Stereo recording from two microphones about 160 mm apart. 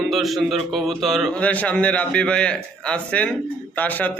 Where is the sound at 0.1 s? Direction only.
Centre (ahead or behind).